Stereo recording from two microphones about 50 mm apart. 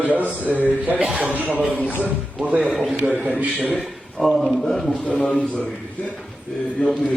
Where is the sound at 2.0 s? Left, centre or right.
Right.